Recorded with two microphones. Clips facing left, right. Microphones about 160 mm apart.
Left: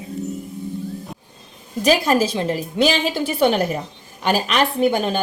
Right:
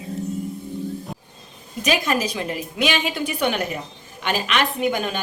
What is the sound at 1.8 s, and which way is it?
A woman's voice, 35° left (ahead or behind).